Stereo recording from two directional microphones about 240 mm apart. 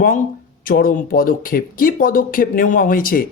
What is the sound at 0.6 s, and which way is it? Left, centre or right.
Speech, left.